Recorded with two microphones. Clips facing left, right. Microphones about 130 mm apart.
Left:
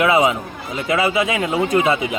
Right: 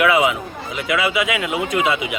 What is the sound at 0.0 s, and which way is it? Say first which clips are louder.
Speech: left 1 dB; 30° left (ahead or behind).